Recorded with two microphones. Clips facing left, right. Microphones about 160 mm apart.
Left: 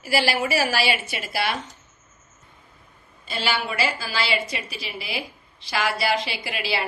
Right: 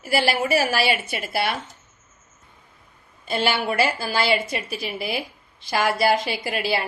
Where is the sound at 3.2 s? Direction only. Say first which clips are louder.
Right 4 dB; 55° right (ahead or behind).